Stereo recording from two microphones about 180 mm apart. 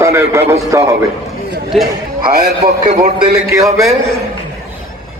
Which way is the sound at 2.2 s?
55° right (ahead or behind).